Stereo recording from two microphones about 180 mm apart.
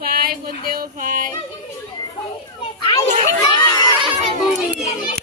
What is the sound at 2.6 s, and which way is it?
Children playing, 30° left (ahead or behind).